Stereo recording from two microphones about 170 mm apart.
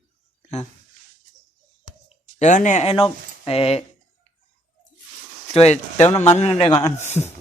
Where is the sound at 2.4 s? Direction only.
45° left (ahead or behind).